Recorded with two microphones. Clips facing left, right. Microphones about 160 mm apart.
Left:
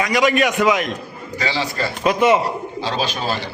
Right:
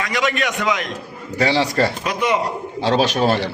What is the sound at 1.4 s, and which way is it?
A man's voice, 70° right (ahead or behind).